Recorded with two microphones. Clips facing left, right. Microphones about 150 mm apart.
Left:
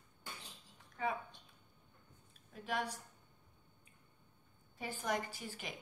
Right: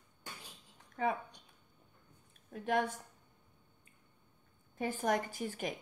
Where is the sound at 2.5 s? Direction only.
50° right (ahead or behind).